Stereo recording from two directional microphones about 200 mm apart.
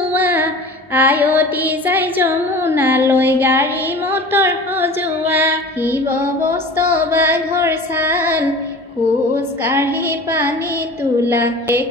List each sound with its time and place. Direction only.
0.1 s music: 10° right (ahead or behind)
6.5 s female singing: 10° right (ahead or behind)
11.2 s female singing: 10° right (ahead or behind)